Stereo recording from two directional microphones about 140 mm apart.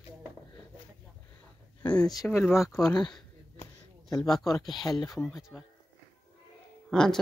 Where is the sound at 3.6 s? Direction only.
25° left (ahead or behind).